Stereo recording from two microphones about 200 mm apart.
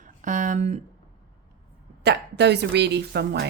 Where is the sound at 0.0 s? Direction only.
40° right (ahead or behind).